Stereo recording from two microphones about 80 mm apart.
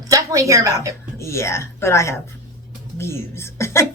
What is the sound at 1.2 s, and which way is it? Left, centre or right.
Speech, left.